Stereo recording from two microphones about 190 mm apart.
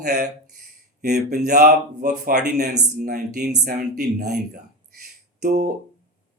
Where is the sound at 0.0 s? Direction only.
55° right (ahead or behind).